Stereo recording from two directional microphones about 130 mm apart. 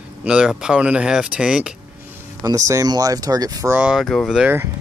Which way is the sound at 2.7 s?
25° right (ahead or behind).